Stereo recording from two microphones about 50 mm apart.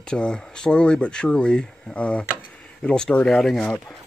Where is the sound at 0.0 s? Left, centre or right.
Centre.